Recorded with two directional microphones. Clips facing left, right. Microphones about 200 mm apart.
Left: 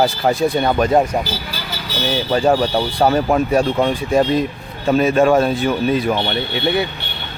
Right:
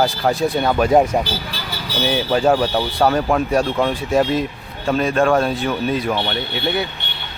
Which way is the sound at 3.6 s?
15° left (ahead or behind).